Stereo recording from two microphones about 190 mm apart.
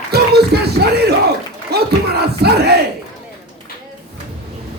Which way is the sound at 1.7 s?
60° right (ahead or behind).